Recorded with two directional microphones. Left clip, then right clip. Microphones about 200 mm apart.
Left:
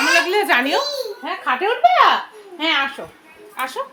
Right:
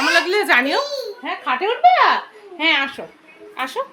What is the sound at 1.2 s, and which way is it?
A woman's voice, 5° right (ahead or behind).